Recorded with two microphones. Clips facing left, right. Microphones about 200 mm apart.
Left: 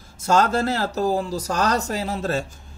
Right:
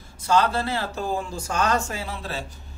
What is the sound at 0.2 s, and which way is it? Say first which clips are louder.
Speech: left 2 dB; 45° left (ahead or behind).